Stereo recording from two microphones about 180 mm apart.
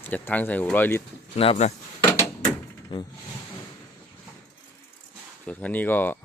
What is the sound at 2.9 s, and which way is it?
Speech, 25° left (ahead or behind).